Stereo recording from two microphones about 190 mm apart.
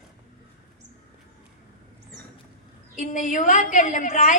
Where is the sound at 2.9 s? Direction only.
40° left (ahead or behind).